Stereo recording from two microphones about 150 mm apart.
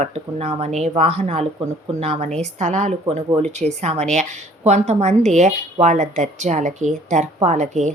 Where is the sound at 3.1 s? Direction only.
40° right (ahead or behind).